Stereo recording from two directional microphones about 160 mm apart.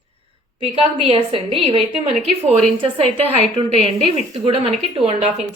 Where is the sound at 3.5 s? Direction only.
35° right (ahead or behind).